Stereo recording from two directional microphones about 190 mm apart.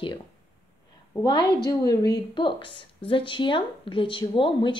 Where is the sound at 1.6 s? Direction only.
20° left (ahead or behind).